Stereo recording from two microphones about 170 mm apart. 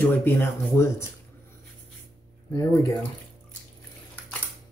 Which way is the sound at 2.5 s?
15° left (ahead or behind).